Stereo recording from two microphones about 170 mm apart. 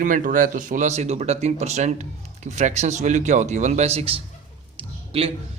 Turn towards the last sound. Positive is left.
turn(degrees=-35)  # may be behind; listen again after turning